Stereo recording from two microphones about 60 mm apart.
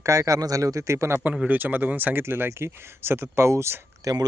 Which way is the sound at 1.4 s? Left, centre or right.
Right.